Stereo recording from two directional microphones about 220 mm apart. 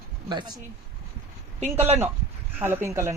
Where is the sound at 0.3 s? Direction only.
20° right (ahead or behind).